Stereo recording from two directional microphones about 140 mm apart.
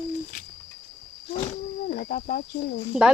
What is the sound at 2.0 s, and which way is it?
Speech, 90° left.